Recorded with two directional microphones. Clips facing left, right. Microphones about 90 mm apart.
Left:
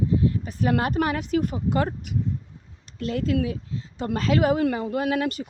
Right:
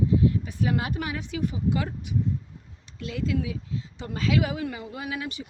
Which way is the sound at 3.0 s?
50° left (ahead or behind).